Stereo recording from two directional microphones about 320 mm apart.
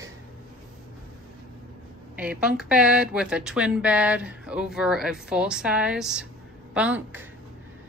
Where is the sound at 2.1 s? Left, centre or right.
Centre.